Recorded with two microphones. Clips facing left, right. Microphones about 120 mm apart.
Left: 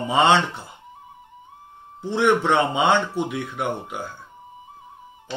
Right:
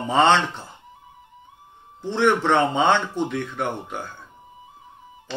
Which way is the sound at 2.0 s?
10° left (ahead or behind).